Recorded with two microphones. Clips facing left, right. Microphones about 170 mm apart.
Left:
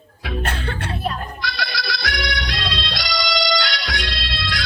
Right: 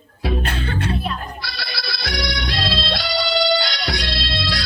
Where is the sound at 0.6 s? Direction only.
55° left (ahead or behind).